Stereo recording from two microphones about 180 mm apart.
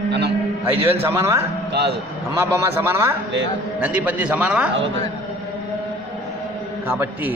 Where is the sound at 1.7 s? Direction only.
65° right (ahead or behind).